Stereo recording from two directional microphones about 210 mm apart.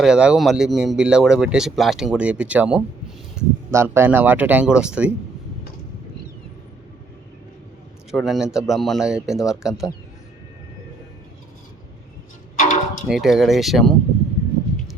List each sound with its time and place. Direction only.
0.0 s speech: 5° right (ahead or behind)
8.1 s speech: centre (ahead or behind)
12.5 s a sound: 35° left (ahead or behind)
13.1 s speech: centre (ahead or behind)